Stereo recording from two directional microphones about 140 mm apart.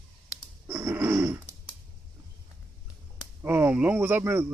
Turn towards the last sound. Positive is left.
turn(degrees=-15)  # may be behind; listen again after turning